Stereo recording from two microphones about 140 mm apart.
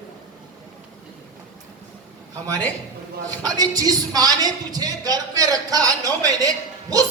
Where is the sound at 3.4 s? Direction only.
25° right (ahead or behind).